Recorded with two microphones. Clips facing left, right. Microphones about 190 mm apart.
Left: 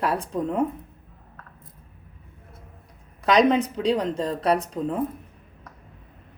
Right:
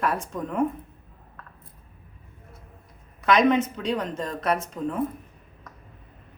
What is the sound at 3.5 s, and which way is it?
Speech, 30° left (ahead or behind).